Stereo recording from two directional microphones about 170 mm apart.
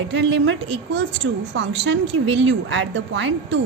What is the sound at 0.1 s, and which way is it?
A woman's voice, 90° right.